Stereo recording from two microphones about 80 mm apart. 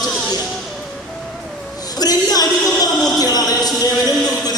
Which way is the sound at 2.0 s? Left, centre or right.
Left.